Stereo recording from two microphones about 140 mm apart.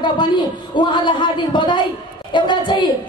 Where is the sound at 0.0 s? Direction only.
35° left (ahead or behind).